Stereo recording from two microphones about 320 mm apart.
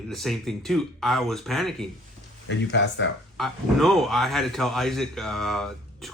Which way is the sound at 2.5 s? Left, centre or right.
Left.